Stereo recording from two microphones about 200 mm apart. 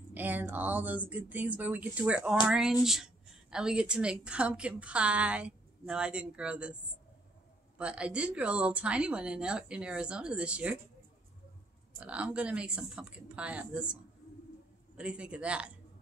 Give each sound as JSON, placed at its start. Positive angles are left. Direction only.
{"t": 0.1, "sound": "a woman's voice", "side_deg": -10}
{"t": 12.0, "sound": "a woman's voice", "side_deg": -5}
{"t": 15.0, "sound": "a woman's voice", "side_deg": -5}